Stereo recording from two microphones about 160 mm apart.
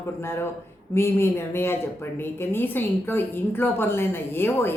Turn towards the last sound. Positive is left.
turn(degrees=15)  # may be behind; listen again after turning